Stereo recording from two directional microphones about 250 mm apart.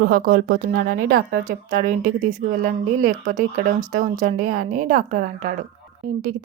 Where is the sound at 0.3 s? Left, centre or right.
Right.